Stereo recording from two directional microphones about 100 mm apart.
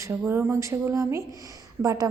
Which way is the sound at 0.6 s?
30° right (ahead or behind).